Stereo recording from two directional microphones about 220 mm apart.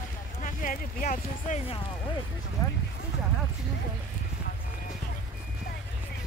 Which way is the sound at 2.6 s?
15° left (ahead or behind).